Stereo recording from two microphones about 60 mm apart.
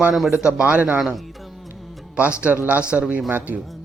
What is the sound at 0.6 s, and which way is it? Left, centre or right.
Speech, right.